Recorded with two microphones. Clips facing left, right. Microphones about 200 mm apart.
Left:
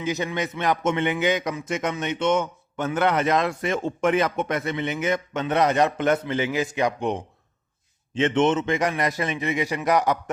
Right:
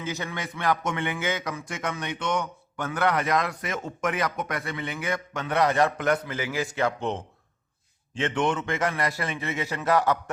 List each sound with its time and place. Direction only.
0.0 s a man's voice: 20° left (ahead or behind)